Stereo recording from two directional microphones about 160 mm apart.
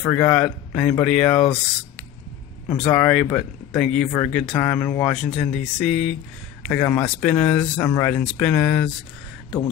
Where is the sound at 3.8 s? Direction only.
5° left (ahead or behind).